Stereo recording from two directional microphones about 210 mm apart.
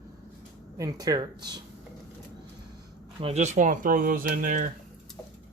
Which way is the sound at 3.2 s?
30° right (ahead or behind).